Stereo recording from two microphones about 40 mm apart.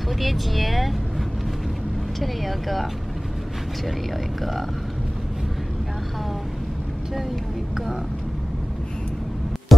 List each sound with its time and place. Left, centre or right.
0.2 s vehicle: centre
2.1 s speech: centre
9.7 s music: centre